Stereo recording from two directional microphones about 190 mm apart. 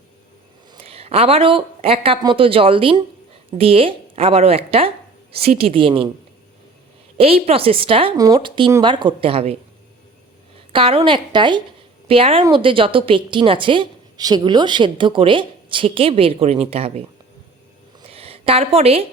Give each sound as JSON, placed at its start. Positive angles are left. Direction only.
{"t": 0.7, "sound": "a woman's voice", "side_deg": -30}
{"t": 7.2, "sound": "a woman's voice", "side_deg": -30}
{"t": 10.7, "sound": "a woman's voice", "side_deg": -30}
{"t": 18.0, "sound": "a sound", "side_deg": -30}